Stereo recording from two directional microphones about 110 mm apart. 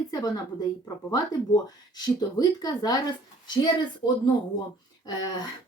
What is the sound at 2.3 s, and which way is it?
Speech, 35° left (ahead or behind).